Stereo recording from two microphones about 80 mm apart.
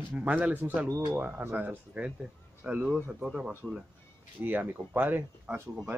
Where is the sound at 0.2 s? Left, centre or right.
Centre.